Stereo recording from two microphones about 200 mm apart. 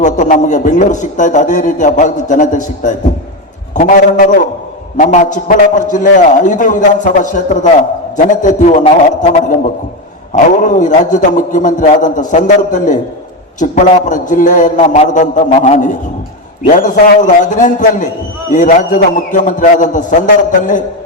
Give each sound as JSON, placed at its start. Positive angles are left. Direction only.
{"t": 0.0, "sound": "a man's voice", "side_deg": 40}
{"t": 4.9, "sound": "a man's voice", "side_deg": 40}